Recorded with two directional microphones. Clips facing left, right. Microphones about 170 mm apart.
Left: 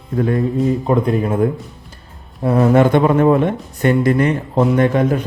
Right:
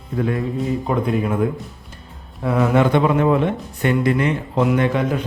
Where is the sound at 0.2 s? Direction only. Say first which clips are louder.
Left 4 dB; 40° left (ahead or behind).